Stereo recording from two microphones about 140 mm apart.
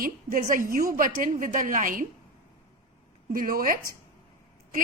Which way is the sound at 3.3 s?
90° right.